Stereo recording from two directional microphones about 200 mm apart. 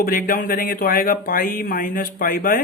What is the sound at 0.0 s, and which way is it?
Speech, 45° left (ahead or behind).